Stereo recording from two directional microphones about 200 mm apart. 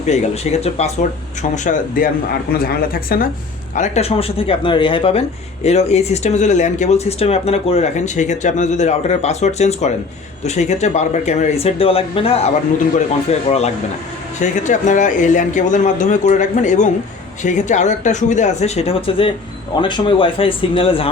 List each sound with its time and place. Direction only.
0.1 s speech: 35° left (ahead or behind); by 3.2 s 50° left (ahead or behind)
3.8 s speech: 30° left (ahead or behind)